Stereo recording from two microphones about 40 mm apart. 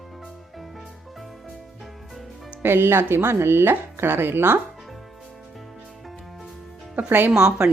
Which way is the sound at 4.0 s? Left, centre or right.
Right.